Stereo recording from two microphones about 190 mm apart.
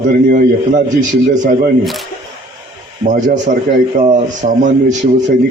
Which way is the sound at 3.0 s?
40° right (ahead or behind).